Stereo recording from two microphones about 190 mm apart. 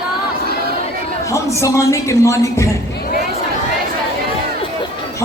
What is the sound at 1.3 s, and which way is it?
Speech, 15° left (ahead or behind).